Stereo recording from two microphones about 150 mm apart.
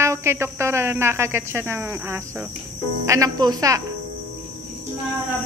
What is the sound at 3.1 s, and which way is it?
Speech, 25° right (ahead or behind).